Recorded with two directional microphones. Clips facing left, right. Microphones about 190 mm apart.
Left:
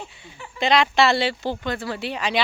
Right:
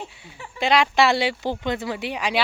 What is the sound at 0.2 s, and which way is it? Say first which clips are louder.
Speech: left 1 dB; 10° right (ahead or behind).